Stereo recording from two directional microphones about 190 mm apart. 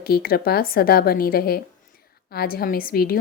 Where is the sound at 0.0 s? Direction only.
55° left (ahead or behind).